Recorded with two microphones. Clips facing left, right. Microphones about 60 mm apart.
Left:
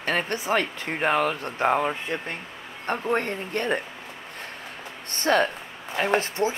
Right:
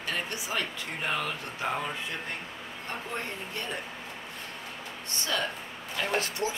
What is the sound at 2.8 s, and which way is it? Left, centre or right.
Speech, left.